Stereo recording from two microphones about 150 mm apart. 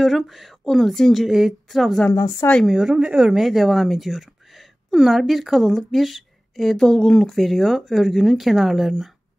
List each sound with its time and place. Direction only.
0.0 s speech: centre (ahead or behind)
2.0 s a woman's voice: 20° left (ahead or behind)
2.5 s speech: centre (ahead or behind)